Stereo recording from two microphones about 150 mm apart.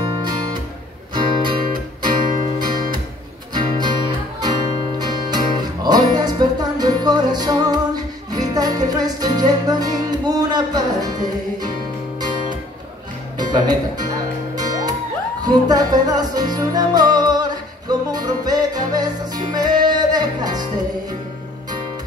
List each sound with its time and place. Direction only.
0.0 s guitar: 30° right (ahead or behind)
1.1 s music: 35° right (ahead or behind)
3.5 s music: 30° right (ahead or behind)
13.4 s speech: 30° right (ahead or behind)
14.5 s music: 25° right (ahead or behind)